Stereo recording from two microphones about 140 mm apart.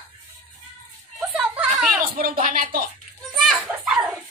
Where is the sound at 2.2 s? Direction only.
85° right.